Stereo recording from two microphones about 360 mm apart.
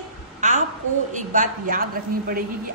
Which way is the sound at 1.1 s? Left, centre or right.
Right.